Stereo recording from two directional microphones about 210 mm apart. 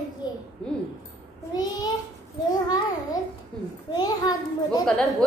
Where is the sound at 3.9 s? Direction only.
20° left (ahead or behind).